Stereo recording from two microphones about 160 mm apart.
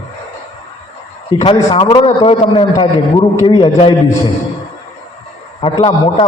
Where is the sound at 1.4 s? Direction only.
35° left (ahead or behind).